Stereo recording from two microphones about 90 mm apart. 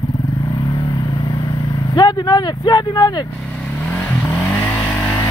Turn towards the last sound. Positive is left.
turn(degrees=25)  # may be behind; listen again after turning